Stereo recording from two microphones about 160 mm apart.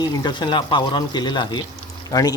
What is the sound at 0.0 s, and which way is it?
Speech, 25° left (ahead or behind).